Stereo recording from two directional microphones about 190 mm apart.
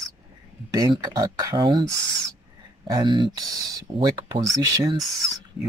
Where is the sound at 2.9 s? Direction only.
25° right (ahead or behind).